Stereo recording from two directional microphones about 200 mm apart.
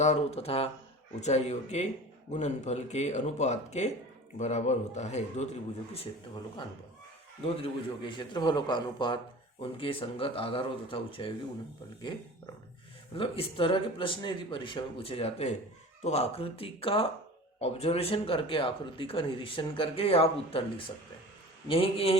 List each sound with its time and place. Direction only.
0.0 s a man's voice: 35° left (ahead or behind)
13.1 s a man's voice: 25° left (ahead or behind)